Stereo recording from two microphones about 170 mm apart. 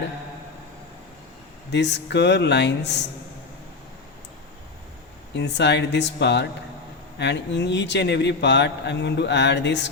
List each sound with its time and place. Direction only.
1.7 s a man's voice: 90° left
5.3 s a man's voice: 90° left